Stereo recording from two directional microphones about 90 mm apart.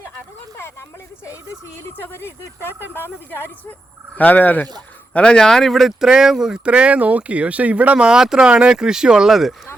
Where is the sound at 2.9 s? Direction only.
25° left (ahead or behind).